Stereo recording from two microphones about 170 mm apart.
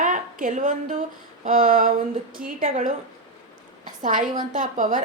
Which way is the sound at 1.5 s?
50° right (ahead or behind).